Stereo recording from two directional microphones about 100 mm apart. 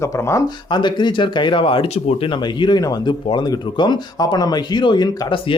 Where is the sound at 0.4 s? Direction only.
50° left (ahead or behind).